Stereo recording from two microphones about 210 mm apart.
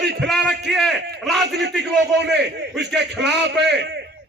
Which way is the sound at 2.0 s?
55° right (ahead or behind).